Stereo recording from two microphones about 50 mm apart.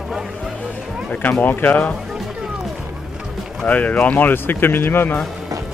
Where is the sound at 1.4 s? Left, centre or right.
Left.